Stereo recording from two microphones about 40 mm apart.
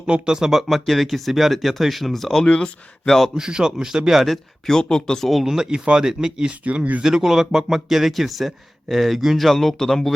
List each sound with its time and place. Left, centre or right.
0.3 s speech: centre
0.7 s speech: centre
2.4 s speech: left
3.3 s speech: centre
4.6 s speech: centre
5.3 s speech: centre
9.5 s speech: centre